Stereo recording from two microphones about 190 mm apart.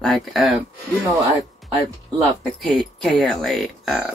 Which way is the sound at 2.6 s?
Centre (ahead or behind).